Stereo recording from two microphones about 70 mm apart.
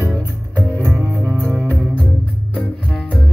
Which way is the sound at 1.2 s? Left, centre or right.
Centre.